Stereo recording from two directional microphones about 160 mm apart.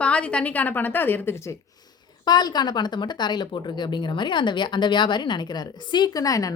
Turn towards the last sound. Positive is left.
turn(degrees=20)  # may be behind; listen again after turning